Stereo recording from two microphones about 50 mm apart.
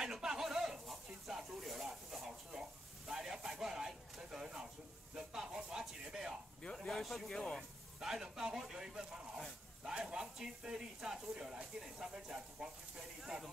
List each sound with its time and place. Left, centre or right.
0.0 s snake: centre
3.1 s a sound: centre
5.1 s speech: centre
6.6 s a sound: left
6.9 s speech: centre
8.0 s speech: centre